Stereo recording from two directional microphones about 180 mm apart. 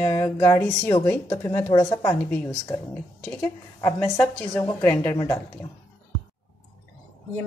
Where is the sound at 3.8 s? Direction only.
15° left (ahead or behind).